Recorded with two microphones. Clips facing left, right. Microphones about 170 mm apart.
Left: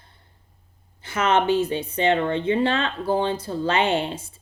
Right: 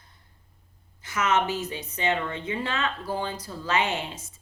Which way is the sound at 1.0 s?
30° left (ahead or behind).